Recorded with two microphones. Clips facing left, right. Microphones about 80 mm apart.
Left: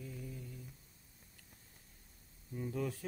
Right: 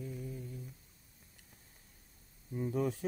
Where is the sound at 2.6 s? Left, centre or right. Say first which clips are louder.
Right 5 dB; right.